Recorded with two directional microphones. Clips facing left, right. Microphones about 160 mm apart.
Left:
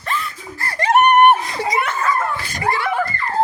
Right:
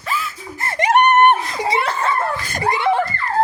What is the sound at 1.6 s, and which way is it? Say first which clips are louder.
Laughter: right 1 dB; 30° right (ahead or behind).